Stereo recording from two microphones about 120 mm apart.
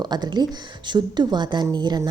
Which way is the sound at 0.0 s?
35° right (ahead or behind).